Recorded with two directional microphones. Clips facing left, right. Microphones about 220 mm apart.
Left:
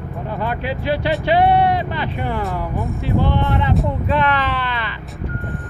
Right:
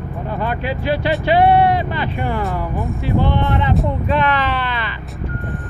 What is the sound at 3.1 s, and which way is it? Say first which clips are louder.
Speech: right 1 dB; 15° right (ahead or behind).